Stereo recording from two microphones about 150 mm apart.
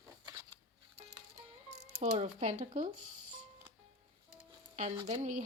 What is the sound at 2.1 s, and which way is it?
Speech, 55° right (ahead or behind).